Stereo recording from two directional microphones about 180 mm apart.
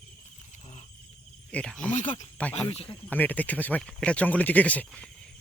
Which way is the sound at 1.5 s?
5° left (ahead or behind).